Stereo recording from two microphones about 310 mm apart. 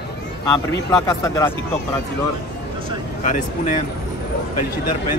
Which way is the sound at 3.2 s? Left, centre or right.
Left.